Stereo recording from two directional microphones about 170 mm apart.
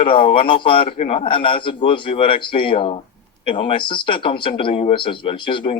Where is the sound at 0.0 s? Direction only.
30° left (ahead or behind).